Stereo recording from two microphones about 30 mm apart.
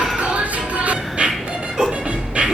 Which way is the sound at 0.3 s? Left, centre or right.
Right.